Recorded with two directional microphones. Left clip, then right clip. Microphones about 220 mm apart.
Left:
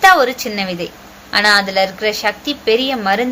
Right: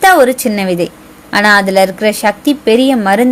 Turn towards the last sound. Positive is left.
turn(degrees=-45)  # may be behind; listen again after turning